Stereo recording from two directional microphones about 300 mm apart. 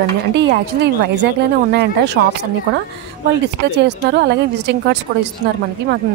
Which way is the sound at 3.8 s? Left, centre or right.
Right.